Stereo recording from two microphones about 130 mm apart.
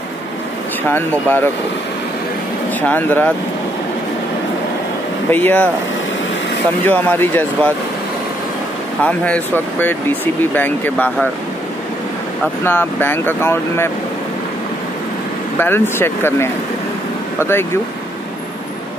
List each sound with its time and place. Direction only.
0.8 s speech: 15° left (ahead or behind)
2.9 s speech: 15° left (ahead or behind)
5.3 s speech: 15° left (ahead or behind)
6.9 s speech: 15° left (ahead or behind)
9.0 s speech: 10° left (ahead or behind)
12.6 s speech: 15° left (ahead or behind)
15.6 s speech: 15° left (ahead or behind)